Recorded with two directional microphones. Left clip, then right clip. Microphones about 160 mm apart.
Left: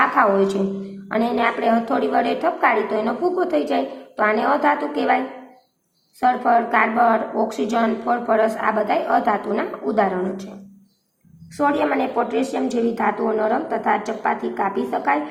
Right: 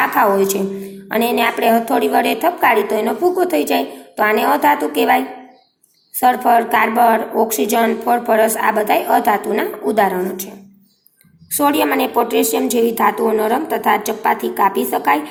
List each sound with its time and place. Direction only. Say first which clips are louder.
0.0 s a woman's voice: right 2 dB; 25° right (ahead or behind)
11.5 s a woman's voice: right 4 dB; 30° right (ahead or behind)